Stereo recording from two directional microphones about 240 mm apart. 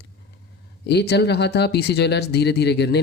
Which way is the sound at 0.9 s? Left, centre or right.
Left.